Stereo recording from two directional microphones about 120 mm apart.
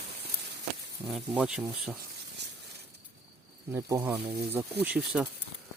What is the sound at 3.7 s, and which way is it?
Speech, 20° right (ahead or behind).